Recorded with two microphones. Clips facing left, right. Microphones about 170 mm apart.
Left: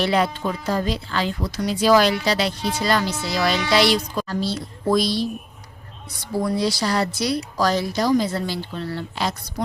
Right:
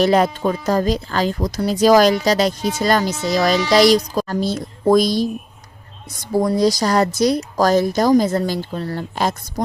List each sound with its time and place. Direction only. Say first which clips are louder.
0.0 s speech: right 5 dB; 45° right (ahead or behind)